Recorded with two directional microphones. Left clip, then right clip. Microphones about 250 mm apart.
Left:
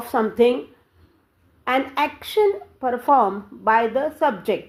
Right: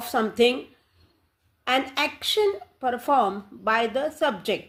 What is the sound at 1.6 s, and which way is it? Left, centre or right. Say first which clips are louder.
Speech: left 3 dB; right.